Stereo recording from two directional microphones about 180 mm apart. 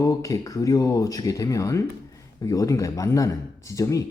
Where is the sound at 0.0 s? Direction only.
20° left (ahead or behind).